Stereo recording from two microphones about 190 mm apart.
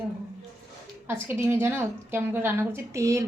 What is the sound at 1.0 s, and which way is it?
A woman's voice, 15° right (ahead or behind).